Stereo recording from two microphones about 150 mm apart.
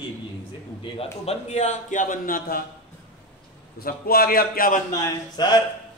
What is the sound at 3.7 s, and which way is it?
A man's voice, 90° left.